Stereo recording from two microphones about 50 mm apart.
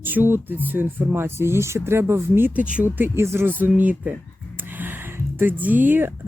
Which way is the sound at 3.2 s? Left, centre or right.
Right.